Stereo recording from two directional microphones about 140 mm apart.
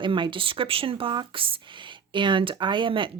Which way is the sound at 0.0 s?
35° right (ahead or behind).